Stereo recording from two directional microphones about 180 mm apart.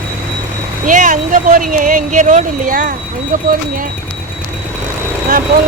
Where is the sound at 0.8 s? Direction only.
45° right (ahead or behind).